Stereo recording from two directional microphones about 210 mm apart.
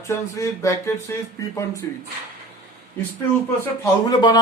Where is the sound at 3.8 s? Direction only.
20° left (ahead or behind).